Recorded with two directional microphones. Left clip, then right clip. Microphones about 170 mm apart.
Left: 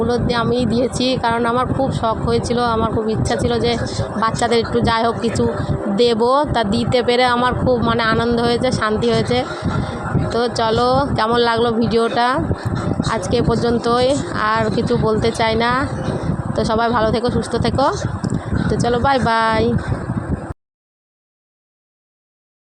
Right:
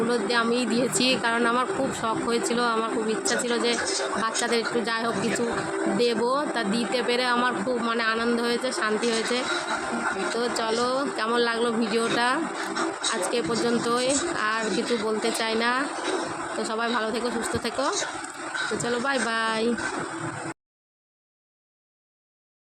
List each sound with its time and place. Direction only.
0.1 s speech: 35° left (ahead or behind)